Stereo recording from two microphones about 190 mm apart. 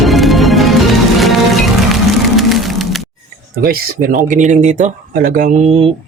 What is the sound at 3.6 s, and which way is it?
Speech, 50° right (ahead or behind).